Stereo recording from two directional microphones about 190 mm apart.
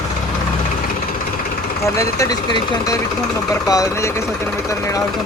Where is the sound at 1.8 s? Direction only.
15° left (ahead or behind).